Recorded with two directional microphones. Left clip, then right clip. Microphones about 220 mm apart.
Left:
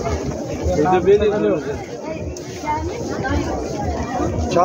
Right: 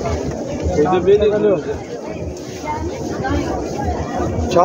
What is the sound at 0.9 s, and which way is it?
Speech, 40° left (ahead or behind).